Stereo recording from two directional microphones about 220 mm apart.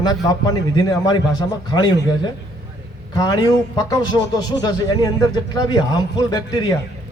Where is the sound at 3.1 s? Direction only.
15° left (ahead or behind).